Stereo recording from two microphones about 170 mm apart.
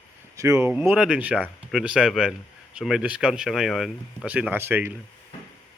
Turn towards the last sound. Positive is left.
turn(degrees=-15)  # may be behind; listen again after turning